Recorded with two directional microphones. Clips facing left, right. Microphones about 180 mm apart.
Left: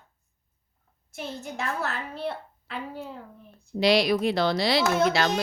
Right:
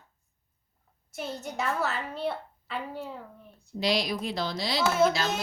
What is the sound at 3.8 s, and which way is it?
Speech, 70° left (ahead or behind).